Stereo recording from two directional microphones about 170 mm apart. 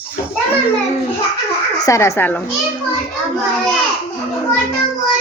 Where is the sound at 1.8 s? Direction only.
15° left (ahead or behind).